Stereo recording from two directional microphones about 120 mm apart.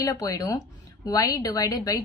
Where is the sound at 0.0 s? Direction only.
30° left (ahead or behind).